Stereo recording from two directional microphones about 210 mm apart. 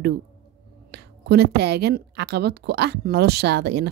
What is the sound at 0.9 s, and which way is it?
A woman's voice, 50° right (ahead or behind).